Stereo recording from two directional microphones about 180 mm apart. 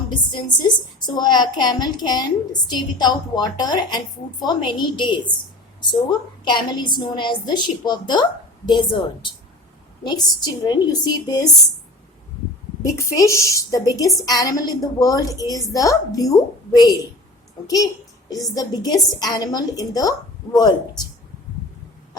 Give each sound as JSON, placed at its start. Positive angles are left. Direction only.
{"t": 0.1, "sound": "a woman's voice", "side_deg": 25}
{"t": 12.8, "sound": "a woman's voice", "side_deg": 15}
{"t": 18.5, "sound": "a woman's voice", "side_deg": 20}